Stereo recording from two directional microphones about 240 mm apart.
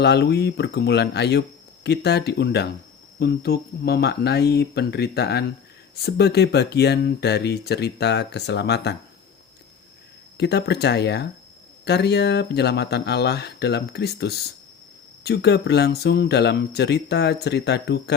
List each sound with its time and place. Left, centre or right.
0.0 s speech: left
10.3 s speech: left